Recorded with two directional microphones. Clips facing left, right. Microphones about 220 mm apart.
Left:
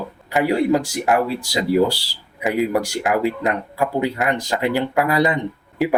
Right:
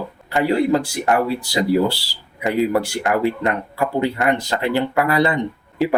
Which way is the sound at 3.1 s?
15° left (ahead or behind).